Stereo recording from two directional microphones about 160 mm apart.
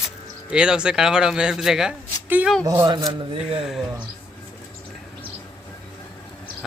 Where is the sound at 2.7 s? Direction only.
25° right (ahead or behind).